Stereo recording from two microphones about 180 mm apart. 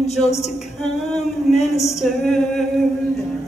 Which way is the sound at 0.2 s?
35° left (ahead or behind).